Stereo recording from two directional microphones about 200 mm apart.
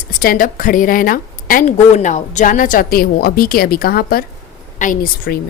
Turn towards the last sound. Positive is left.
turn(degrees=45)  # may be behind; listen again after turning